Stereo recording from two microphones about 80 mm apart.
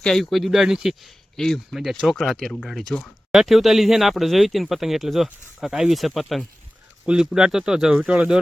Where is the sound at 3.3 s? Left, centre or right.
Centre.